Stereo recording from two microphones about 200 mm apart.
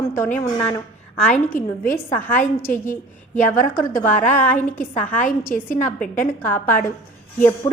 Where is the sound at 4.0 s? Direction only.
10° left (ahead or behind).